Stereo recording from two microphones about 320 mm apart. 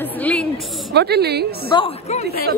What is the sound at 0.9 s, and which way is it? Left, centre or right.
Speech, right.